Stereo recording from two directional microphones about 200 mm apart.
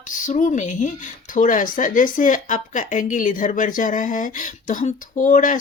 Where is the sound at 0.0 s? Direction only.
40° left (ahead or behind).